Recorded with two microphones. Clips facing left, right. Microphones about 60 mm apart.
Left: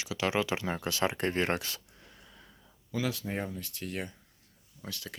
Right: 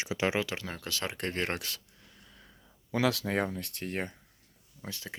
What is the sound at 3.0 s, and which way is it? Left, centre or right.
Speech, right.